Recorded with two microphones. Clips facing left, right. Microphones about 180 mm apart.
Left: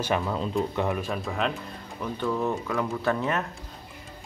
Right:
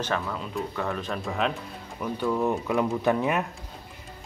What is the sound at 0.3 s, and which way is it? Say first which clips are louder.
Speech: left 5 dB; 25° left (ahead or behind).